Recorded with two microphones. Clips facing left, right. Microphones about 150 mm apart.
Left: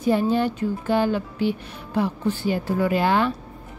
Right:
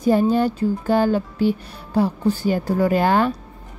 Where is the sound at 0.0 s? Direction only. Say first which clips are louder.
Right 3 dB; 40° right (ahead or behind).